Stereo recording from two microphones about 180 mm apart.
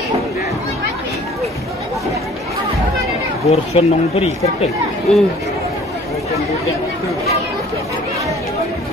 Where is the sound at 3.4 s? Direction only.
35° left (ahead or behind).